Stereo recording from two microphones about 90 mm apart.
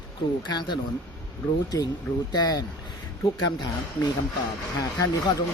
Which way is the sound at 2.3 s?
45° left (ahead or behind).